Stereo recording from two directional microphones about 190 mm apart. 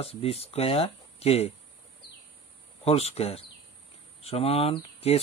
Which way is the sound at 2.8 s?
30° left (ahead or behind).